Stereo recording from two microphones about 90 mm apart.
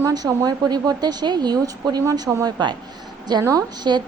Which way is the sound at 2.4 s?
55° right (ahead or behind).